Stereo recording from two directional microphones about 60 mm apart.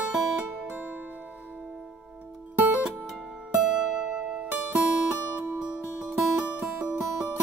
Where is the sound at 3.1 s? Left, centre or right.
Centre.